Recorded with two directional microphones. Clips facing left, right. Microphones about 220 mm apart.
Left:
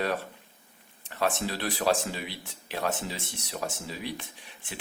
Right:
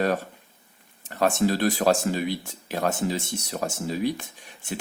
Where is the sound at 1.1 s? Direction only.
45° right (ahead or behind).